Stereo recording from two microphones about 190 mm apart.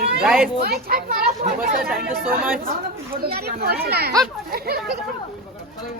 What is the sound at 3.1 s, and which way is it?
Speech, 55° right (ahead or behind).